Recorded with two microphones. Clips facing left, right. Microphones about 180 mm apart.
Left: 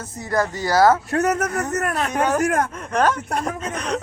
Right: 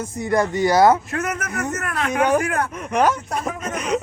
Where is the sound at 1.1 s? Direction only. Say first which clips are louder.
Left 5 dB; 40° left (ahead or behind).